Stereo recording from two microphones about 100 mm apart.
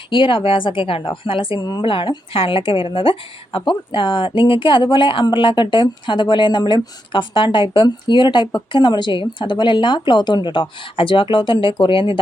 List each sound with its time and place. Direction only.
0.1 s speech: 60° left (ahead or behind)